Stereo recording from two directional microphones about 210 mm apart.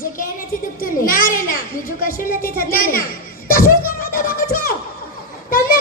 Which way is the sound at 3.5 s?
45° left (ahead or behind).